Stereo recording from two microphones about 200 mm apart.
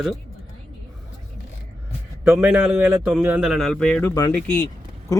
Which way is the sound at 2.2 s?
5° right (ahead or behind).